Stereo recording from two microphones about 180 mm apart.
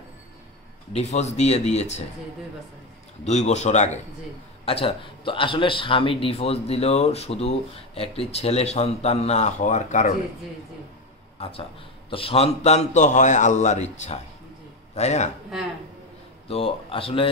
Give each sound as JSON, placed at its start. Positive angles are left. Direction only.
{"t": 0.9, "sound": "a man's voice", "side_deg": 40}
{"t": 3.3, "sound": "a man's voice", "side_deg": 40}
{"t": 11.3, "sound": "a man's voice", "side_deg": 35}
{"t": 16.4, "sound": "a man's voice", "side_deg": 30}